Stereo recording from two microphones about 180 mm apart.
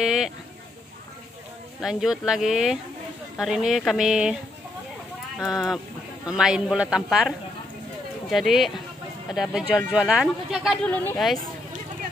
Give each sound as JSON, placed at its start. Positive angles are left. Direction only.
{"t": 0.0, "sound": "a sound", "side_deg": 0}
{"t": 1.8, "sound": "speech", "side_deg": 0}
{"t": 5.4, "sound": "speech", "side_deg": 0}